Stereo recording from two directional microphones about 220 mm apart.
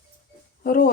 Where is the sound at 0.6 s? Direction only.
40° left (ahead or behind).